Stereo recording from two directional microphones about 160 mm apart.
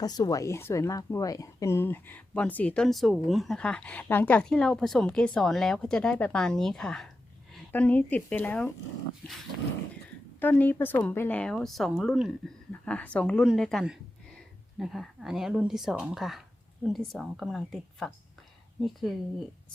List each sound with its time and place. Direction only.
0.0 s a woman's voice: 25° left (ahead or behind)
10.4 s a woman's voice: 10° left (ahead or behind)